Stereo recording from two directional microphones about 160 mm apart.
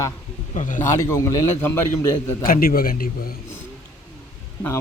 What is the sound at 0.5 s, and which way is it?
Speech, 50° left (ahead or behind).